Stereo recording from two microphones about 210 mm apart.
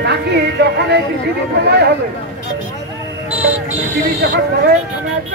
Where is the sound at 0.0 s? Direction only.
50° right (ahead or behind).